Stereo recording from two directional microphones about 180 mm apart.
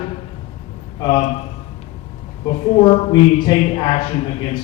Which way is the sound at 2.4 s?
25° left (ahead or behind).